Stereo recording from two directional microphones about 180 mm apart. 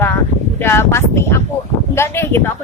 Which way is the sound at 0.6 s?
15° left (ahead or behind).